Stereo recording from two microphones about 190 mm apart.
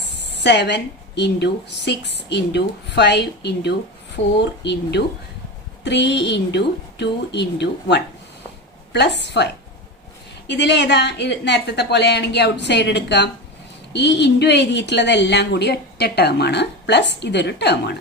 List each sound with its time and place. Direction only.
0.3 s a woman's voice: 65° left (ahead or behind)